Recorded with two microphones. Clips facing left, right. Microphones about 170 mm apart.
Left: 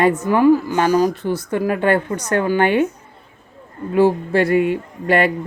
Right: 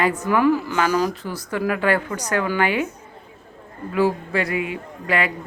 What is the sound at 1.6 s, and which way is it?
Speech, 35° left (ahead or behind).